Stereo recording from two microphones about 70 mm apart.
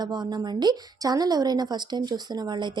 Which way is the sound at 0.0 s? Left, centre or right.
Right.